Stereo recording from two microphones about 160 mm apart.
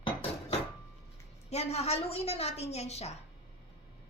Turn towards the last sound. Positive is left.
turn(degrees=40)  # may be behind; listen again after turning